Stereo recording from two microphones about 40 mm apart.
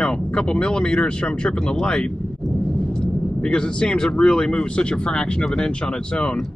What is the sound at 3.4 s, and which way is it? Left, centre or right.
Speech, left.